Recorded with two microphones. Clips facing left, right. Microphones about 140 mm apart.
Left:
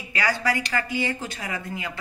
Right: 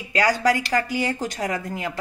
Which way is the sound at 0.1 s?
40° right (ahead or behind).